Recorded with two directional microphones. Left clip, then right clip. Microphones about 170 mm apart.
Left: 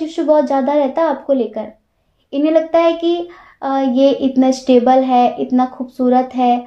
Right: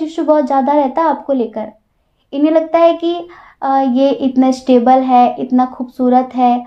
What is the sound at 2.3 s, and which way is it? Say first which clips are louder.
Child singing: right 1 dB; 30° right (ahead or behind).